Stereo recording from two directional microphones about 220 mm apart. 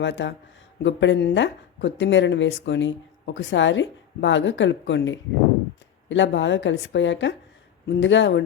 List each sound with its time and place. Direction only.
0.0 s speech: 55° left (ahead or behind)